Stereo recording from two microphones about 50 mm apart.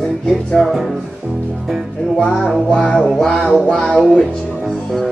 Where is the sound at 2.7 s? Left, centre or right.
Left.